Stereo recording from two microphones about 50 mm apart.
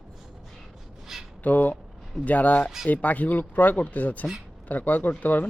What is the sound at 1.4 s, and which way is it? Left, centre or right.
Speech, left.